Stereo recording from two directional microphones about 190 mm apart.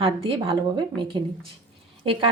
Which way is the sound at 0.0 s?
30° right (ahead or behind).